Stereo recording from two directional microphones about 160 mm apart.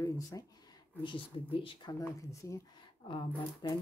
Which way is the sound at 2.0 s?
20° left (ahead or behind).